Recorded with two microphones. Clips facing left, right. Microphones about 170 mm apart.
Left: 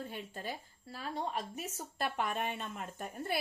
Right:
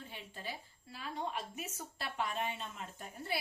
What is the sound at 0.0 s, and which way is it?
A woman's voice, 45° left (ahead or behind).